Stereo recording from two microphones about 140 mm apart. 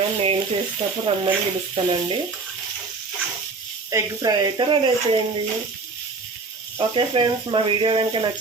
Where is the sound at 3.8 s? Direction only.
25° right (ahead or behind).